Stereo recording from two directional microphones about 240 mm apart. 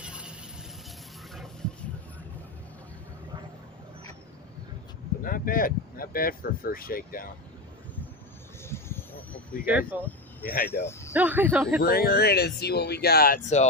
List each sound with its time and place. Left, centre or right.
0.0 s a sound: centre
5.2 s speech: left
8.6 s vehicle: centre
9.6 s speech: centre
10.4 s speech: left
10.7 s speech: centre
11.1 s speech: centre
11.8 s speech: left